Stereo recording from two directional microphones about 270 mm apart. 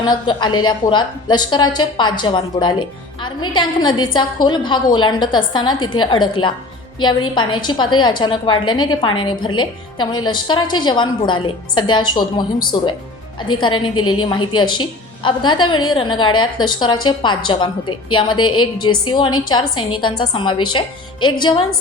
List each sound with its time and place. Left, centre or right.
0.0 s a woman's voice: centre